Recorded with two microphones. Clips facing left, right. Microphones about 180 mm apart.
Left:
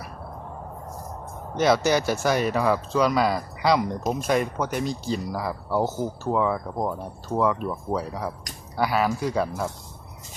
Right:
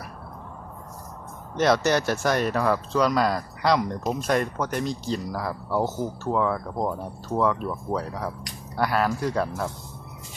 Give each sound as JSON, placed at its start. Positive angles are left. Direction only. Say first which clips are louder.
{"t": 1.5, "sound": "speech", "louder": "left 1 dB", "side_deg": 0}